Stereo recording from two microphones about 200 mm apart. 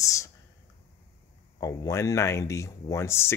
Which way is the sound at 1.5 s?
15° left (ahead or behind).